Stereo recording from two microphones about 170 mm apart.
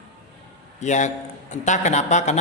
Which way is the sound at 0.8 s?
45° left (ahead or behind).